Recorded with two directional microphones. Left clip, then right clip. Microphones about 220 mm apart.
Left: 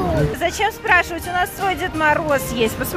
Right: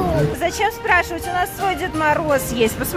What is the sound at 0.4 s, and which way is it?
Speech, 10° right (ahead or behind).